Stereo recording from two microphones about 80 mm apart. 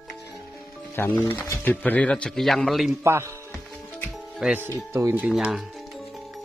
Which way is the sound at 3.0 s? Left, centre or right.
Right.